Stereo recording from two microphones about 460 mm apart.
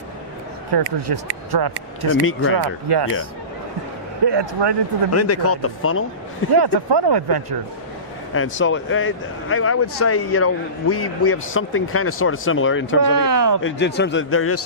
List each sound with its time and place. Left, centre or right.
0.7 s speech: right
2.2 s speech: left
2.6 s speech: right
4.3 s speech: right
5.1 s speech: left
6.6 s speech: right
8.3 s speech: left
13.1 s a sound: right
13.6 s speech: left